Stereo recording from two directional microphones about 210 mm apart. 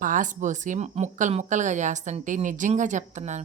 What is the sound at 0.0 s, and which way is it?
A woman's voice, 40° right (ahead or behind).